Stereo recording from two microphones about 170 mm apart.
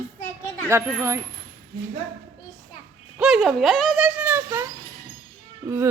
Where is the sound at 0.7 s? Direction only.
15° right (ahead or behind).